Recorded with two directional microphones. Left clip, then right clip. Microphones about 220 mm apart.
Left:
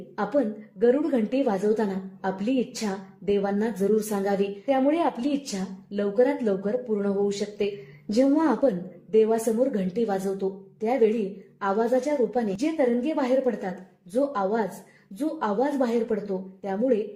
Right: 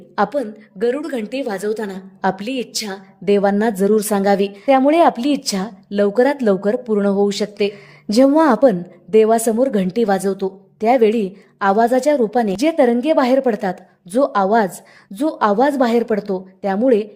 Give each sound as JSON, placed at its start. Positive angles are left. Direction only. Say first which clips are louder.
{"t": 0.2, "sound": "a woman's voice", "louder": "right 7 dB", "side_deg": -40}